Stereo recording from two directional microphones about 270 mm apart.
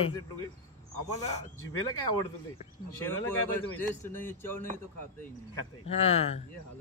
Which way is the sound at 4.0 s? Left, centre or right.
Centre.